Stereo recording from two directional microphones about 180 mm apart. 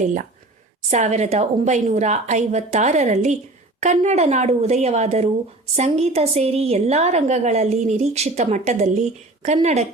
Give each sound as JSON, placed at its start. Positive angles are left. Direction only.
{"t": 0.0, "sound": "a woman's voice", "side_deg": -45}